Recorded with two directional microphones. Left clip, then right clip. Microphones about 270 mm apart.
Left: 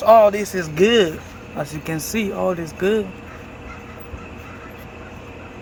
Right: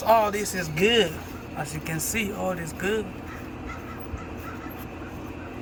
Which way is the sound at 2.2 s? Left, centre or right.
Centre.